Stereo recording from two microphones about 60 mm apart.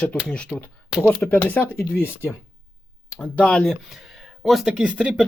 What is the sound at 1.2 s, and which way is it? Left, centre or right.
Speech, left.